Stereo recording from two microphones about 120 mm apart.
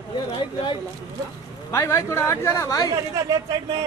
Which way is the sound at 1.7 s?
20° left (ahead or behind).